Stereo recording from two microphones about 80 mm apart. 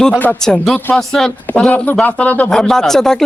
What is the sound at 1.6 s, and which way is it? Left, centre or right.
Speech, centre.